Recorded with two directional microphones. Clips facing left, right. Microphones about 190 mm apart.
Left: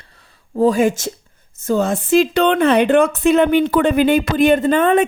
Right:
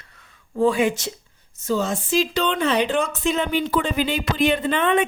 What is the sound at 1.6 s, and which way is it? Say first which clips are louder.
Speech: left 5 dB; 55° left (ahead or behind).